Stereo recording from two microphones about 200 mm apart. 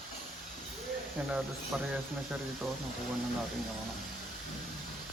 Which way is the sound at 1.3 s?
5° right (ahead or behind).